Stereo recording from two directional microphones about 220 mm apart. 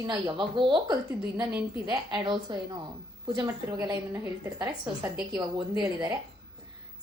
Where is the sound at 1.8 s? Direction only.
20° right (ahead or behind).